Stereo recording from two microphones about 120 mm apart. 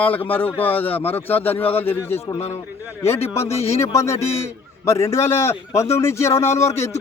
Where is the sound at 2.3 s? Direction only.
60° left (ahead or behind).